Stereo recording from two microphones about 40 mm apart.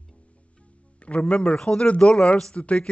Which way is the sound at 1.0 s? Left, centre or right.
Left.